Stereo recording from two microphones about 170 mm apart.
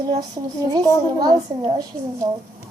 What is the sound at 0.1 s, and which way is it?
A woman's voice, 25° right (ahead or behind).